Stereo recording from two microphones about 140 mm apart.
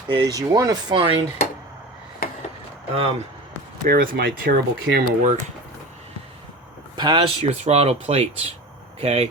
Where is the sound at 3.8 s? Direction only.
90° right.